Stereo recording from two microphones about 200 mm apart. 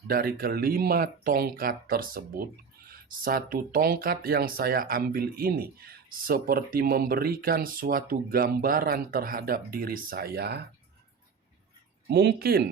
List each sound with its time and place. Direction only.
0.1 s speech: 50° right (ahead or behind)
12.1 s speech: 50° right (ahead or behind)